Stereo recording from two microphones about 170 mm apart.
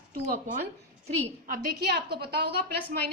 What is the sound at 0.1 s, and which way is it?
A woman's voice, 50° right (ahead or behind).